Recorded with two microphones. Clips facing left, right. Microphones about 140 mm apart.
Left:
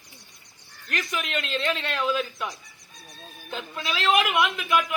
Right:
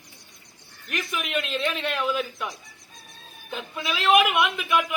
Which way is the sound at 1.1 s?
5° right (ahead or behind).